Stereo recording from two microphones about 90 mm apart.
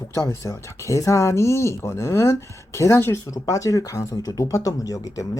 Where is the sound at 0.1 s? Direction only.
35° left (ahead or behind).